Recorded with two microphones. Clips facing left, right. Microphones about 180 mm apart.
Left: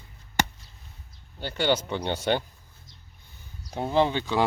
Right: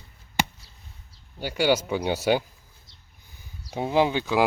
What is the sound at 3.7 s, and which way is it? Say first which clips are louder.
Speech: right 1 dB; 5° right (ahead or behind).